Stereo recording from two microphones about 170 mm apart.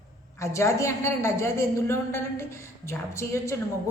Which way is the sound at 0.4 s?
15° left (ahead or behind).